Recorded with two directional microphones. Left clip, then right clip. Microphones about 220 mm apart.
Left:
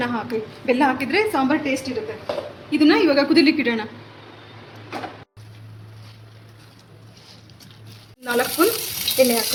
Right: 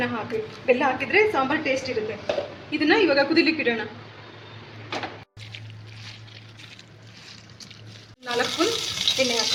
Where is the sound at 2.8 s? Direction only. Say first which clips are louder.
Left 3 dB; 45° left (ahead or behind).